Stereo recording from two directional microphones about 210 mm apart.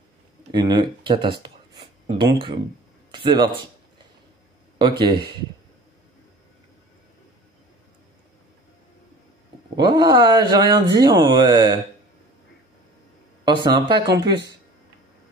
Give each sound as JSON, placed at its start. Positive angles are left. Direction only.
{"t": 0.5, "sound": "a man's voice", "side_deg": -20}
{"t": 4.7, "sound": "speech", "side_deg": -20}
{"t": 9.8, "sound": "speech", "side_deg": -20}
{"t": 13.5, "sound": "speech", "side_deg": -20}